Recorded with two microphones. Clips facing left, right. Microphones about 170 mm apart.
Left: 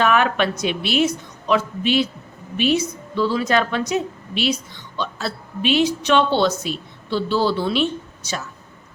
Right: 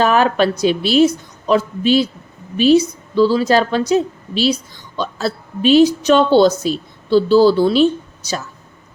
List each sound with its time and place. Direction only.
0.0 s a woman's voice: 35° right (ahead or behind)